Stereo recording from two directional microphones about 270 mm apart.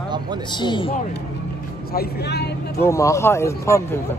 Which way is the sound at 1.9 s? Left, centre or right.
Left.